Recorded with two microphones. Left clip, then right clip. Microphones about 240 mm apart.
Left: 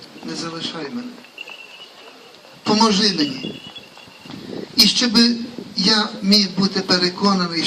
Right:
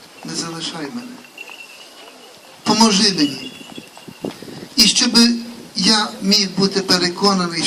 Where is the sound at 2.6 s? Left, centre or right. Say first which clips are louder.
Right 2 dB; right.